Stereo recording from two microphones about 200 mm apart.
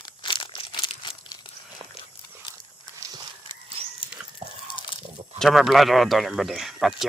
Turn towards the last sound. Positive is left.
turn(degrees=0)  # may be behind; listen again after turning